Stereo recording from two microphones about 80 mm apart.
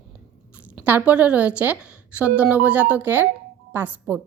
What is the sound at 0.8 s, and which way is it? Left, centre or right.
A woman's voice, right.